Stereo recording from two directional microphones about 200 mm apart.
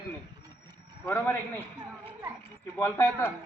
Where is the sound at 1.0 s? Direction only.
10° left (ahead or behind).